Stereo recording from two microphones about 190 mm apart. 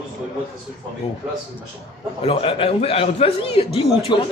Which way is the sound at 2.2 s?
30° left (ahead or behind).